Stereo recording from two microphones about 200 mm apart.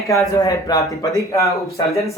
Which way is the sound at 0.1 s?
15° left (ahead or behind).